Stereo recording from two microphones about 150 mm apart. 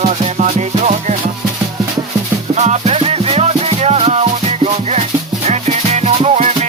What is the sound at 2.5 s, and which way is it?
Music, 50° right (ahead or behind).